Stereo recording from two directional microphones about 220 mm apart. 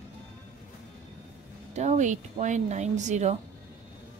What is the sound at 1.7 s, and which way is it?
Speech, 30° right (ahead or behind).